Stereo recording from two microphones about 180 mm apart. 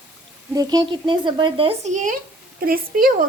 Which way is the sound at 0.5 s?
20° right (ahead or behind).